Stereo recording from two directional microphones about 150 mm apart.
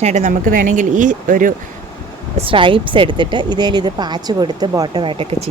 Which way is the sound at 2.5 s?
35° right (ahead or behind).